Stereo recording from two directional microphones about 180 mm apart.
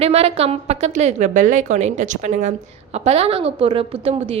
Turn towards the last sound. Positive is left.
turn(degrees=-35)  # may be behind; listen again after turning